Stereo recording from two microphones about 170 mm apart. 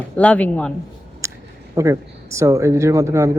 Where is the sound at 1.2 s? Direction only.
15° right (ahead or behind).